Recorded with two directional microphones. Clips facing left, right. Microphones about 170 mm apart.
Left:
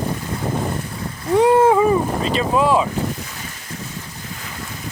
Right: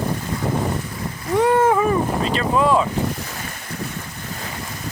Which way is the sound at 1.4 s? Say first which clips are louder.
Left 3 dB; 15° left (ahead or behind).